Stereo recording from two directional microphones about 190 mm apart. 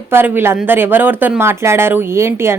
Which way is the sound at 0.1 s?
10° right (ahead or behind).